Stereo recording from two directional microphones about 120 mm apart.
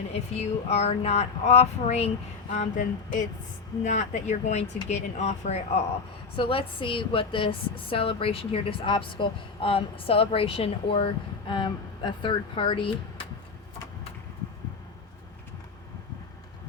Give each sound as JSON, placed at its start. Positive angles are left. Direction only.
{"t": 0.1, "sound": "speech", "side_deg": 60}
{"t": 2.5, "sound": "a sound", "side_deg": 90}
{"t": 3.8, "sound": "speech", "side_deg": 80}
{"t": 4.9, "sound": "speech", "side_deg": 70}
{"t": 6.3, "sound": "a woman's voice", "side_deg": 45}